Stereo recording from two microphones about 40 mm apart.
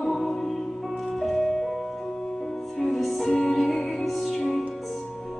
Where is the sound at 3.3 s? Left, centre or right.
Left.